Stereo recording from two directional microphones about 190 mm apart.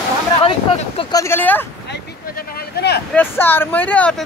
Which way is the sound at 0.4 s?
25° left (ahead or behind).